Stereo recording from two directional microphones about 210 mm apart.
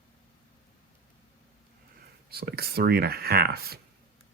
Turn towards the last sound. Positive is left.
turn(degrees=-50)  # may be behind; listen again after turning